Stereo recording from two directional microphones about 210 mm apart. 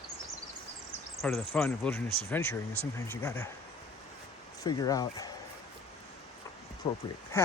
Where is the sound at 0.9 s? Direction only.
5° left (ahead or behind).